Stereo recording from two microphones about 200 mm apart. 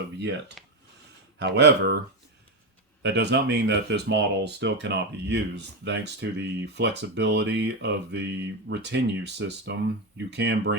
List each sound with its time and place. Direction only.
0.6 s a sound: centre (ahead or behind)
1.4 s speech: 60° right (ahead or behind)
3.0 s speech: 55° right (ahead or behind)